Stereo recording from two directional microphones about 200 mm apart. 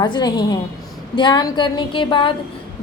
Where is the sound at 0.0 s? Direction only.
20° left (ahead or behind).